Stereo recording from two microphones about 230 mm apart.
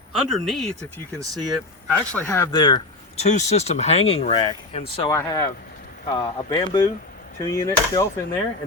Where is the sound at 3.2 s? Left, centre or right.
Left.